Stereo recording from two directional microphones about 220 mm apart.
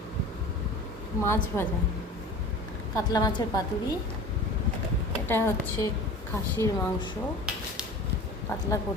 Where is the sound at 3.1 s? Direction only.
20° left (ahead or behind).